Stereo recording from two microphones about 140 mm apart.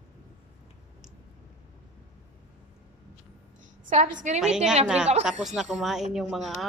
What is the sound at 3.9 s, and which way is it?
Speech, 60° right (ahead or behind).